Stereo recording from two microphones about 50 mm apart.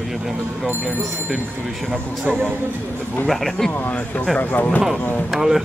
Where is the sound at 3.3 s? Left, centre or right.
Centre.